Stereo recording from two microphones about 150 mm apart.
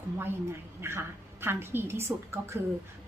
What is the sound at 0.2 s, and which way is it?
A woman's voice, 15° right (ahead or behind).